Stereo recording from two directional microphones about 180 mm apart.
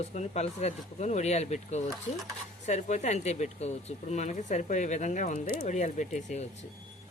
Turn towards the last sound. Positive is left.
turn(degrees=40)  # may be behind; listen again after turning